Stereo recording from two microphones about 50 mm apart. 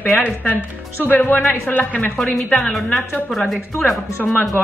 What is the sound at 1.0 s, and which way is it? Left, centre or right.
Speech, left.